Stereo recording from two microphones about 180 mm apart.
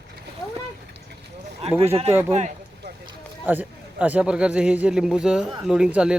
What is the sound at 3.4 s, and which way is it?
A man's voice, 10° right (ahead or behind).